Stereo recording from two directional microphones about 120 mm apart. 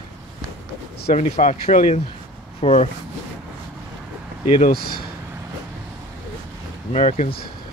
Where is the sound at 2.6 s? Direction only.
60° left (ahead or behind).